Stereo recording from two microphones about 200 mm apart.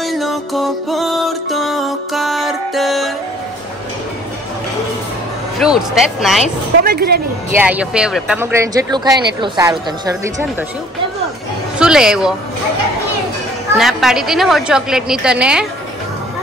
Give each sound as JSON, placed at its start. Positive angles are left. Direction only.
{"t": 0.0, "sound": "music", "side_deg": 0}
{"t": 5.6, "sound": "a woman's voice", "side_deg": -5}
{"t": 6.8, "sound": "a woman's voice", "side_deg": -50}
{"t": 7.5, "sound": "speech", "side_deg": -5}
{"t": 11.8, "sound": "speech", "side_deg": -5}
{"t": 13.7, "sound": "a woman's voice", "side_deg": 0}